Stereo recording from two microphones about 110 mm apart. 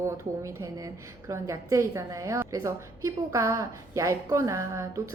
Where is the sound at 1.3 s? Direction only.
25° right (ahead or behind).